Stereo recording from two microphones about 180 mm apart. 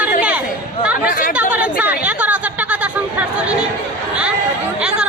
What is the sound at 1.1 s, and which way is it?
Chatter, 50° left (ahead or behind).